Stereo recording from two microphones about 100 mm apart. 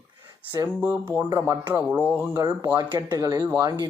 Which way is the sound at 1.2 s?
40° right (ahead or behind).